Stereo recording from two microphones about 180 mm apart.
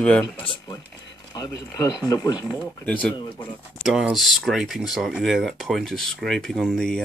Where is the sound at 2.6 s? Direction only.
10° left (ahead or behind).